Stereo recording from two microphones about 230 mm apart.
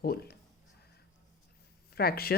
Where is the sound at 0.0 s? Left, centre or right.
Left.